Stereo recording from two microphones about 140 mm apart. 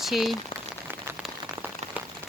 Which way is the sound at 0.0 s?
Centre (ahead or behind).